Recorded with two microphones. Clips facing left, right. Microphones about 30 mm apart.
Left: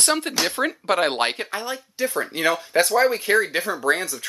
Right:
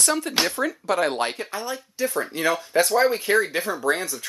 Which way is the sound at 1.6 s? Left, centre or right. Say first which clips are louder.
Left 1 dB; left.